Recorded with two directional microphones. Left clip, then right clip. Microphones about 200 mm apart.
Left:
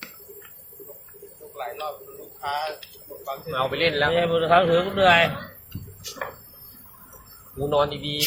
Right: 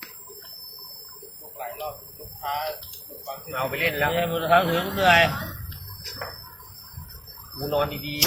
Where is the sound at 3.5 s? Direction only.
30° left (ahead or behind).